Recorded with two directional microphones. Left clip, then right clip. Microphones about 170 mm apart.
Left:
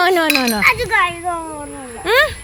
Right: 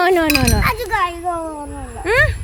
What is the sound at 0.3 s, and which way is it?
Chink, 35° right (ahead or behind).